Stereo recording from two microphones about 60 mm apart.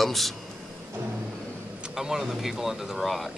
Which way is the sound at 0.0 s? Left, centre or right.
Centre.